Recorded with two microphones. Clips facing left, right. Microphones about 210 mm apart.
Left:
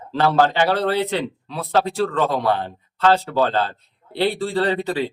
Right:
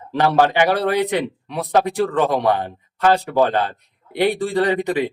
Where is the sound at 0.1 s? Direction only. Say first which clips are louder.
Right 1 dB; 15° right (ahead or behind).